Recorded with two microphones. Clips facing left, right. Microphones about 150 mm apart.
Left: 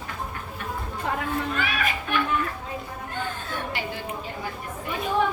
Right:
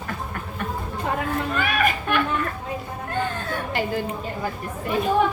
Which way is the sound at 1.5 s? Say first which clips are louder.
Right 5 dB; 50° right (ahead or behind).